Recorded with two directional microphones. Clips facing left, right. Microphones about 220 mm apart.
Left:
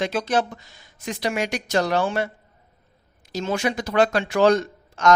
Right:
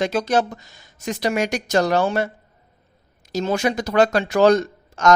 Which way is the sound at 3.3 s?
40° right (ahead or behind).